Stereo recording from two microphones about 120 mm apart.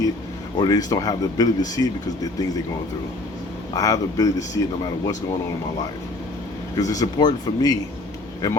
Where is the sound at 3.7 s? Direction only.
30° left (ahead or behind).